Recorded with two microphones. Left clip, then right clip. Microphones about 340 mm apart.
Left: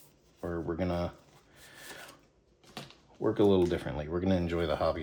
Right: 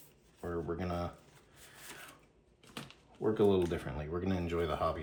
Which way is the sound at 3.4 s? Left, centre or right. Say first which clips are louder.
Left 4 dB; left.